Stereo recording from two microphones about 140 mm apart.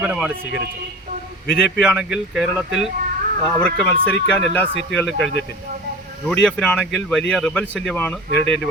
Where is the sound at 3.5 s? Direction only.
5° left (ahead or behind).